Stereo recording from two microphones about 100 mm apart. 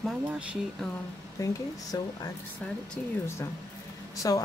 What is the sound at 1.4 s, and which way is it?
Speech, 35° left (ahead or behind).